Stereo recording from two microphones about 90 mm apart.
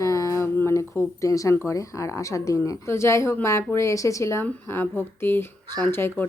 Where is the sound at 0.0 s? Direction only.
40° left (ahead or behind).